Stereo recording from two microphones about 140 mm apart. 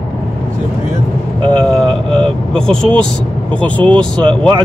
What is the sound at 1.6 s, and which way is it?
Speech, 5° left (ahead or behind).